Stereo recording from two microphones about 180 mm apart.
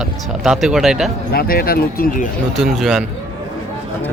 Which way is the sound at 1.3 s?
55° left (ahead or behind).